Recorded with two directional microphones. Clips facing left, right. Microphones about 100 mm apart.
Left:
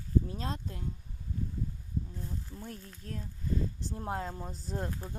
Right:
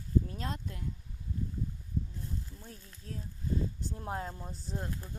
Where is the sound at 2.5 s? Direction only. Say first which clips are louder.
Left 6 dB; 50° left (ahead or behind).